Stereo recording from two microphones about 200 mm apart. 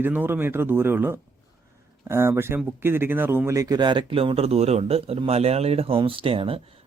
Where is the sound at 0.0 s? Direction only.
10° right (ahead or behind).